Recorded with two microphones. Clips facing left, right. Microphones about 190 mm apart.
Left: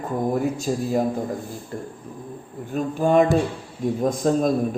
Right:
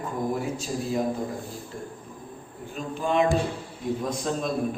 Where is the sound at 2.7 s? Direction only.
50° left (ahead or behind).